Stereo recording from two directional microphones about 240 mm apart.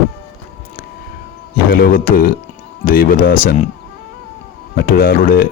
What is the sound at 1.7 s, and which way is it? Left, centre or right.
Speech, left.